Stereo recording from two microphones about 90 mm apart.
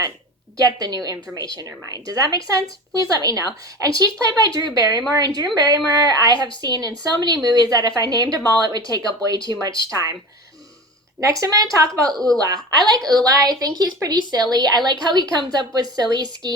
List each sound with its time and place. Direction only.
0.5 s speech: 45° right (ahead or behind)
11.2 s speech: 40° right (ahead or behind)
12.1 s speech: 5° left (ahead or behind)
13.1 s speech: 40° right (ahead or behind)